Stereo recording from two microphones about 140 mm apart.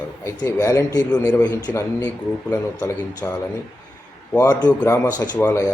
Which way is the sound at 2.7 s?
25° left (ahead or behind).